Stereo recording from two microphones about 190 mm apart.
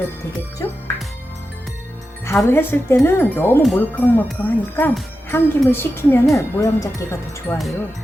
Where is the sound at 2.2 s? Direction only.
15° left (ahead or behind).